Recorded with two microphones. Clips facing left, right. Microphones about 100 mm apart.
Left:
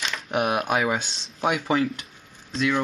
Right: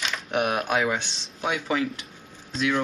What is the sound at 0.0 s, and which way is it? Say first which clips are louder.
Speech: left 1 dB; centre (ahead or behind).